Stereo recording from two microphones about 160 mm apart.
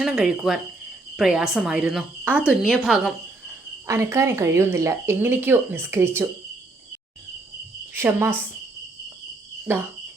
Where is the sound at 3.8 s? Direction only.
20° right (ahead or behind).